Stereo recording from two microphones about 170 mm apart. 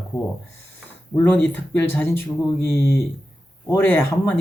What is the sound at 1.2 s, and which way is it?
Speech, 10° left (ahead or behind).